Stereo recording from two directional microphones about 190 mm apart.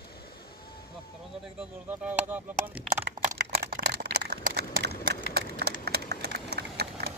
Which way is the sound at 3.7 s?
60° right (ahead or behind).